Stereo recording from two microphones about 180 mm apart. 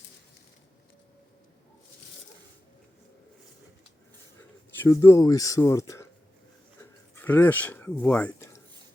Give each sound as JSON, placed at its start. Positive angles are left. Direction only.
{"t": 4.8, "sound": "speech", "side_deg": 15}
{"t": 7.2, "sound": "speech", "side_deg": 10}